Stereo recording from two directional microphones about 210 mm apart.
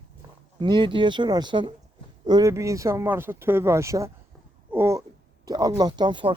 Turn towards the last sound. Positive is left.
turn(degrees=-20)  # may be behind; listen again after turning